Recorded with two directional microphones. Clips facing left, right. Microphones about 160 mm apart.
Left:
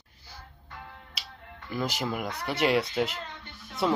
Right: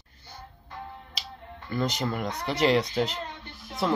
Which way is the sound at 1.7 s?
5° left (ahead or behind).